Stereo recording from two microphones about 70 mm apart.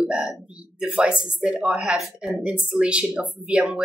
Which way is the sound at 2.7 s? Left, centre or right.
Centre.